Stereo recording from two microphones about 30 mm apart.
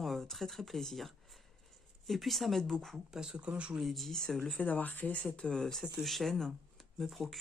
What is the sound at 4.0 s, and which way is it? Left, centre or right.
Speech, centre.